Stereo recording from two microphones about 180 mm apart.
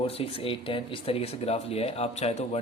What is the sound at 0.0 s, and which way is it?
Speech, 30° left (ahead or behind).